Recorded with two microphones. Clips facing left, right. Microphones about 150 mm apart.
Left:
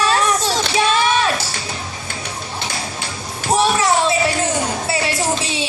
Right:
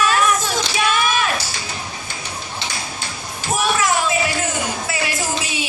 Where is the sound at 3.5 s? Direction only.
35° left (ahead or behind).